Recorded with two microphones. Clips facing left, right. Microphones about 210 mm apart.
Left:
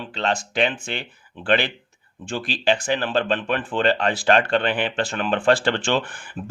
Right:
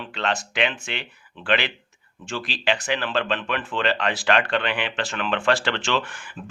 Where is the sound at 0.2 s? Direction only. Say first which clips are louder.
Left 3 dB; 40° left (ahead or behind).